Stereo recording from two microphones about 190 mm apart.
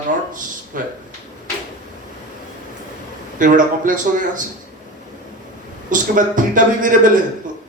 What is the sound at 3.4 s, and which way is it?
A man's voice, 45° right (ahead or behind).